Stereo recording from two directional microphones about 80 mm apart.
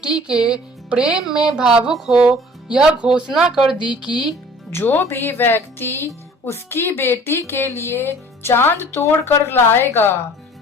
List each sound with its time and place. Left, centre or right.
0.0 s speech: centre
4.7 s speech: left